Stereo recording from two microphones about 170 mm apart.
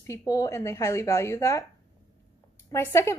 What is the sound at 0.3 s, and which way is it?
A woman's voice, 15° left (ahead or behind).